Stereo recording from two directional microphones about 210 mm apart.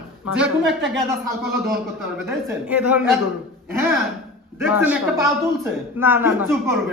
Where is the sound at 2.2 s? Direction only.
5° right (ahead or behind).